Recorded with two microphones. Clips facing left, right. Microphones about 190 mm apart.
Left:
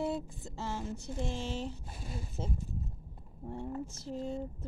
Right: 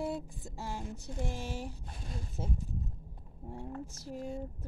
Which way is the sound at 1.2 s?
15° right (ahead or behind).